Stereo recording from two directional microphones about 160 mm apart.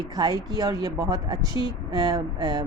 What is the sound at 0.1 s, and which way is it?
A woman's voice, 25° right (ahead or behind).